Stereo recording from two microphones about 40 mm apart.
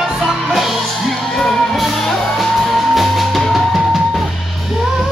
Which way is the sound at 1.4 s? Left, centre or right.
Centre.